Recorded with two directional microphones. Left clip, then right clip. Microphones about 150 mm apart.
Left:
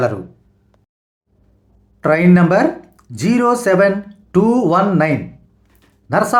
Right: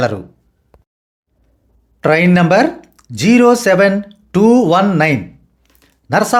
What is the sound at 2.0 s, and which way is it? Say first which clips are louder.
Speech: right 2 dB; 30° right (ahead or behind).